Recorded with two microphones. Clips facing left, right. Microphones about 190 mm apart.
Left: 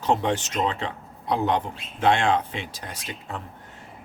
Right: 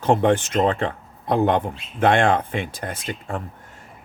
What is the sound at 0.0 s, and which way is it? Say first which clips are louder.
Speech: right 6 dB; 55° right (ahead or behind).